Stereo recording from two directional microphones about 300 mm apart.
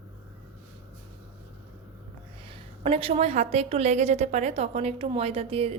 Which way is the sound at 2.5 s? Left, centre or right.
Centre.